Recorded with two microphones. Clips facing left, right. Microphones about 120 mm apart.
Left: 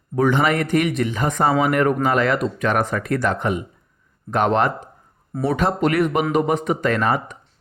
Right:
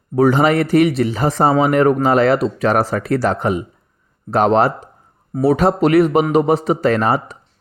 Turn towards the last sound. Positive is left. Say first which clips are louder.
# right 4 dB
turn(degrees=-35)  # may be behind; listen again after turning